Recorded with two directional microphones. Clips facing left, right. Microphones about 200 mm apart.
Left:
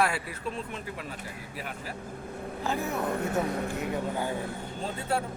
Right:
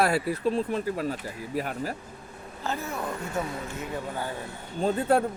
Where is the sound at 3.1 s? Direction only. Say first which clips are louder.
Left 4 dB; 60° left (ahead or behind).